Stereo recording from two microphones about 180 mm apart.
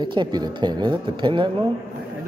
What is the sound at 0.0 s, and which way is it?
Speech, 25° right (ahead or behind).